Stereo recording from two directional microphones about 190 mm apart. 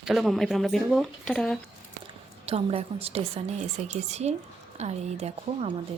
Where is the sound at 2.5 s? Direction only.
30° right (ahead or behind).